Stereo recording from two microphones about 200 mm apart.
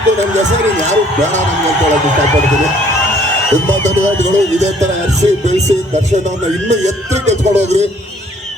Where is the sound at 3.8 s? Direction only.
35° right (ahead or behind).